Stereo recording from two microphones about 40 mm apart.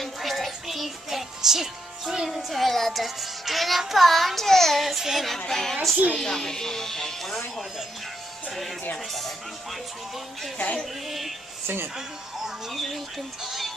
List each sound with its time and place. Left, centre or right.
0.0 s music: centre
3.8 s child singing: centre
5.5 s speech: centre
10.8 s child singing: centre
11.6 s speech: right
12.4 s speech: centre
13.4 s music: centre